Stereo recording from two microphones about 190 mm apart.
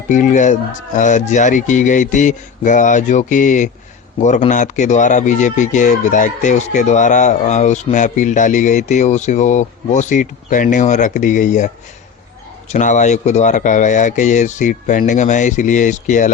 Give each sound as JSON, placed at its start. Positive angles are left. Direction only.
{"t": 0.1, "sound": "speech", "side_deg": 40}